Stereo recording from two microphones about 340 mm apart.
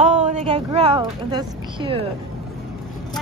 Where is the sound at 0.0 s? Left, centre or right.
Centre.